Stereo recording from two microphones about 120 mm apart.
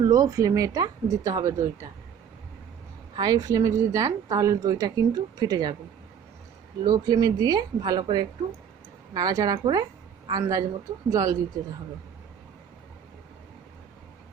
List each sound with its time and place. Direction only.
0.0 s speech: 30° right (ahead or behind)
3.2 s a woman's voice: 35° right (ahead or behind)
6.8 s a woman's voice: 30° right (ahead or behind)